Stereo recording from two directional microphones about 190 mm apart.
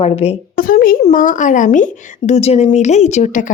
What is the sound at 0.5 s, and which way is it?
A woman's voice, 50° left (ahead or behind).